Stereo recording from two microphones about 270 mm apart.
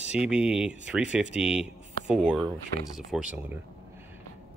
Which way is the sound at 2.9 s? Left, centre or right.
Centre.